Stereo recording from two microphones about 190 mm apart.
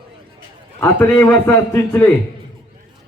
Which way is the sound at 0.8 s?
5° left (ahead or behind).